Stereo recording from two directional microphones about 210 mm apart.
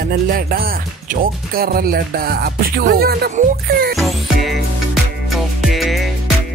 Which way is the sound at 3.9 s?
Centre (ahead or behind).